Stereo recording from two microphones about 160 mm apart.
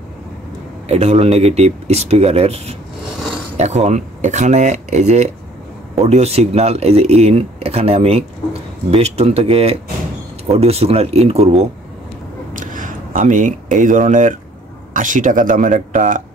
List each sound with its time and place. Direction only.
0.8 s speech: 40° right (ahead or behind)
12.5 s a sound: 55° right (ahead or behind)
15.0 s speech: 55° right (ahead or behind)